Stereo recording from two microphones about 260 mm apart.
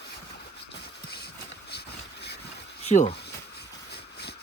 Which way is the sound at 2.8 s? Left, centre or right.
Left.